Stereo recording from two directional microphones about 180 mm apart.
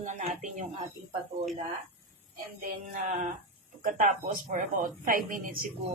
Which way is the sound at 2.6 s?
50° right (ahead or behind).